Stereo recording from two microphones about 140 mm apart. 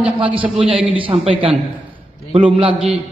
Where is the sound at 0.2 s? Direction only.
40° right (ahead or behind).